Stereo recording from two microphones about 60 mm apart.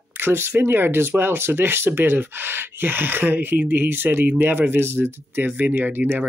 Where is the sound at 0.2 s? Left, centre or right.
Right.